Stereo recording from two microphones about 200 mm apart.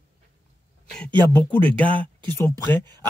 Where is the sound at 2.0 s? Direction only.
25° right (ahead or behind).